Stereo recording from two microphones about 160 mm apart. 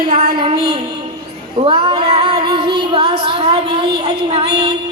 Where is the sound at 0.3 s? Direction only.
30° right (ahead or behind).